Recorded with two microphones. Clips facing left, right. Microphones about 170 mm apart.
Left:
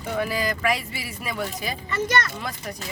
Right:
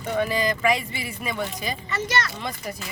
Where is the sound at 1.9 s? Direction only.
50° left (ahead or behind).